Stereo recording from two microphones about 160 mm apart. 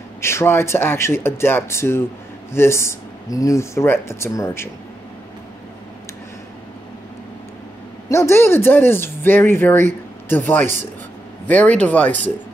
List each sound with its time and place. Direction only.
0.2 s speech: 15° left (ahead or behind)
8.1 s speech: 15° left (ahead or behind)